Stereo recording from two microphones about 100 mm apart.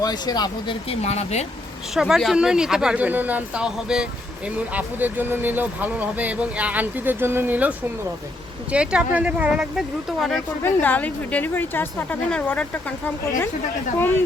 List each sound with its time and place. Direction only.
0.0 s speech: 40° left (ahead or behind)
0.9 s speech: 90° left
2.0 s speech: 5° right (ahead or behind)
10.6 s a woman's voice: 15° left (ahead or behind)